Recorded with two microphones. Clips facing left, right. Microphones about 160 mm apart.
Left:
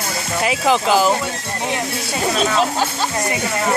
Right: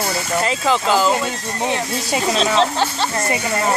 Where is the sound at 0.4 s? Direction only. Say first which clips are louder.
Left 3 dB; 10° left (ahead or behind).